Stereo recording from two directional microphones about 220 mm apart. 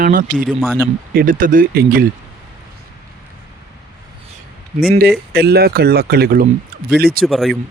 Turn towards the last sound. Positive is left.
turn(degrees=0)  # may be behind; listen again after turning